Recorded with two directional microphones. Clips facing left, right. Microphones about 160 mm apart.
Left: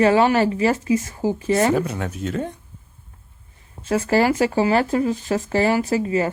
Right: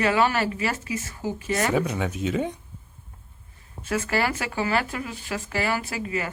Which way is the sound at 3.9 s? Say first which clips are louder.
Left 7 dB; 35° left (ahead or behind).